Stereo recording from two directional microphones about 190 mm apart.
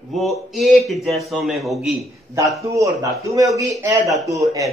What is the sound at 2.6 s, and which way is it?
Speech, 15° right (ahead or behind).